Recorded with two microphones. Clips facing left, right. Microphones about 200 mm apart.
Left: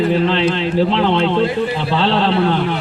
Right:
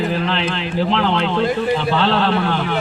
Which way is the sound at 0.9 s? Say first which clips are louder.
Left 3 dB; 25° left (ahead or behind).